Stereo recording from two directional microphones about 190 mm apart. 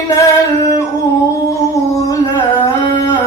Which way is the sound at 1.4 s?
15° left (ahead or behind).